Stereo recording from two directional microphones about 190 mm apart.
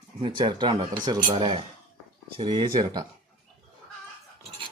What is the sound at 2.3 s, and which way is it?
Speech, 25° right (ahead or behind).